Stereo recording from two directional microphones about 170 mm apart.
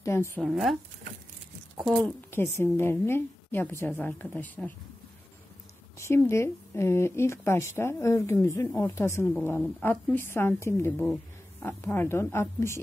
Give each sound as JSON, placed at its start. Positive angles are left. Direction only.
{"t": 0.0, "sound": "speech", "side_deg": 15}
{"t": 0.4, "sound": "speech", "side_deg": 0}
{"t": 1.9, "sound": "speech", "side_deg": 0}
{"t": 2.3, "sound": "speech", "side_deg": 15}
{"t": 5.9, "sound": "speech", "side_deg": 15}